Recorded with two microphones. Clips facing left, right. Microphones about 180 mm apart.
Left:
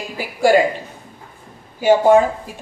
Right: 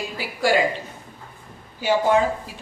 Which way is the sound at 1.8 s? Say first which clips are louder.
Left 7 dB; 50° left (ahead or behind).